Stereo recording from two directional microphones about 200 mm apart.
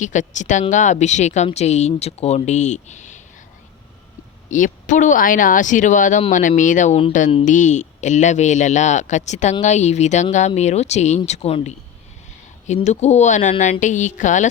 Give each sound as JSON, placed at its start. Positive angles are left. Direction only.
{"t": 0.0, "sound": "speech", "side_deg": 40}
{"t": 4.4, "sound": "speech", "side_deg": 40}